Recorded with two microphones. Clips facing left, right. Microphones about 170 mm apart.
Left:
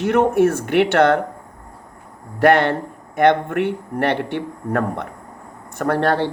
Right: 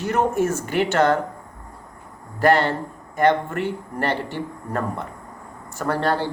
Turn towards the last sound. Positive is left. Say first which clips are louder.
# left 4 dB
turn(degrees=65)  # may be behind; listen again after turning